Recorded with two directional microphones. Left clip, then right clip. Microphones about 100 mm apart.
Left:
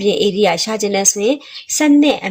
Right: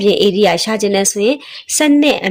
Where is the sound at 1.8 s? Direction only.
65° right (ahead or behind).